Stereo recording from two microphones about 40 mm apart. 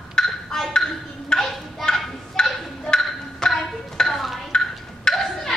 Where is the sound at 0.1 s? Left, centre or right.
Centre.